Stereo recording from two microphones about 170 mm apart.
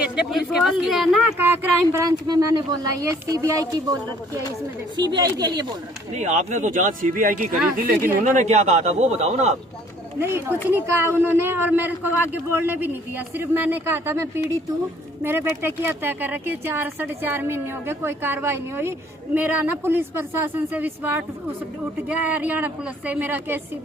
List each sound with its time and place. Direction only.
0.0 s speech: 5° right (ahead or behind)
1.4 s speech: 10° right (ahead or behind)
6.1 s a man's voice: 45° right (ahead or behind)
10.2 s speech: 15° right (ahead or behind)